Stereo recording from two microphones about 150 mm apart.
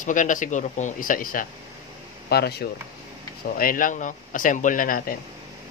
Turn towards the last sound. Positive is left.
turn(degrees=65)  # may be behind; listen again after turning